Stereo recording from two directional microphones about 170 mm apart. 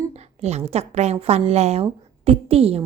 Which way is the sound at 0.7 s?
40° right (ahead or behind).